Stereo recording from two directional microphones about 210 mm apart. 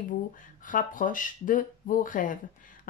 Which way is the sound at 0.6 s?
40° left (ahead or behind).